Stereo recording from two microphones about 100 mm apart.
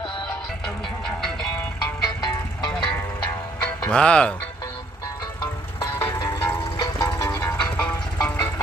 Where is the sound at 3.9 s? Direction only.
10° left (ahead or behind).